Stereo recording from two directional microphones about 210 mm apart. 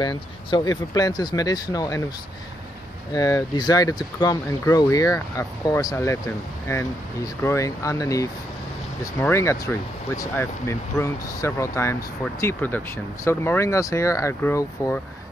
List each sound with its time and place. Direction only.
0.0 s speech: 20° left (ahead or behind)
3.1 s speech: 15° left (ahead or behind)